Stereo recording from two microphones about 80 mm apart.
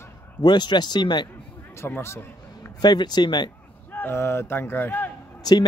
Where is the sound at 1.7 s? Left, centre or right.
Left.